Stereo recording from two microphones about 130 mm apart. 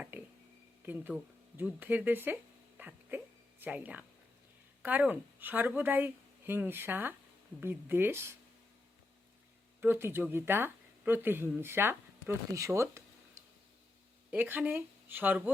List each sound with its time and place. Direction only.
0.1 s a sound: 15° right (ahead or behind)
0.9 s speech: 15° right (ahead or behind)
9.8 s speech: 15° right (ahead or behind)
14.3 s speech: 15° right (ahead or behind)